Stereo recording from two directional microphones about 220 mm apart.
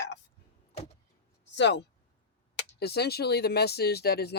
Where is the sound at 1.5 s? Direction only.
50° left (ahead or behind).